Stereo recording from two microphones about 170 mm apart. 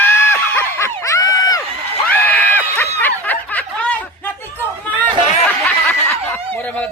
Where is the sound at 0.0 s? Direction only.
15° left (ahead or behind).